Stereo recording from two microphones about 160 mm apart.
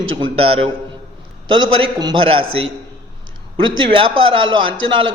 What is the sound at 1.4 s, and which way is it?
A man's voice, 30° right (ahead or behind).